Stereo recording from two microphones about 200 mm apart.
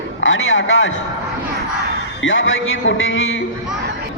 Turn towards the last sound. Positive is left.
turn(degrees=75)  # may be behind; listen again after turning